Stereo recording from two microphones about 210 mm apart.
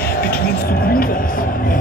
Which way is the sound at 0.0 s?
45° left (ahead or behind).